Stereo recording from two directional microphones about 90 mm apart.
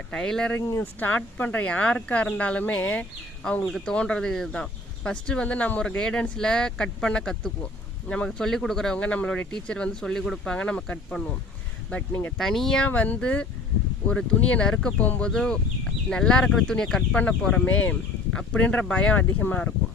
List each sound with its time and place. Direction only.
0.1 s speech: 10° left (ahead or behind)
0.9 s speech: 20° left (ahead or behind)
3.7 s speech: centre (ahead or behind)
3.9 s speech: 10° left (ahead or behind)
12.4 s speech: 5° left (ahead or behind)
12.9 s speech: 15° left (ahead or behind)